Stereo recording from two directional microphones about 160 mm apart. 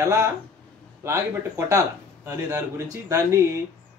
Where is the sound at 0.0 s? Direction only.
15° right (ahead or behind).